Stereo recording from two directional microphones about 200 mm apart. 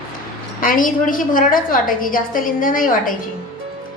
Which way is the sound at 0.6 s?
45° left (ahead or behind).